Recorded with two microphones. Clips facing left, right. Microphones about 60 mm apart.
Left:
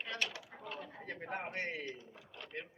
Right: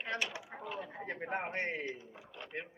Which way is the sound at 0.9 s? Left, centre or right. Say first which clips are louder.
Right 4 dB; right.